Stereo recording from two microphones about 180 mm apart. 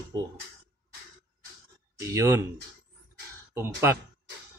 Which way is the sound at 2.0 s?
15° right (ahead or behind).